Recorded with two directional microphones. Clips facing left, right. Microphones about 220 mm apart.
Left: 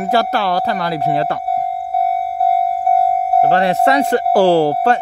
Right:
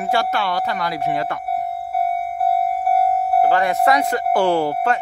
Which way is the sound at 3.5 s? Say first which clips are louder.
Left 3 dB; 30° left (ahead or behind).